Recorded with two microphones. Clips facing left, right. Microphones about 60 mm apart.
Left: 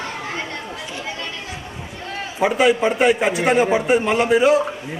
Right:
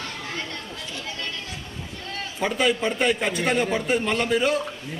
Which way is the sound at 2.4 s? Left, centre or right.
Centre.